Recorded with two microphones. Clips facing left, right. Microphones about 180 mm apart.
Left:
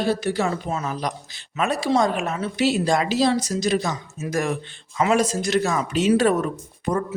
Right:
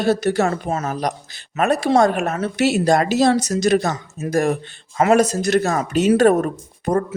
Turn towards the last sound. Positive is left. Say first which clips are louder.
# right 4 dB
turn(degrees=-45)  # may be behind; listen again after turning